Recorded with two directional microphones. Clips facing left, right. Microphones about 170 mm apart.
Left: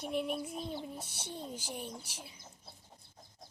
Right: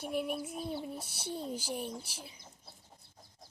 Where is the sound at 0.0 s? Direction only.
5° right (ahead or behind).